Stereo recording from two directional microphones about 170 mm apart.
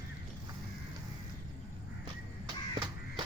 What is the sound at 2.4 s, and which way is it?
Caw, 25° right (ahead or behind).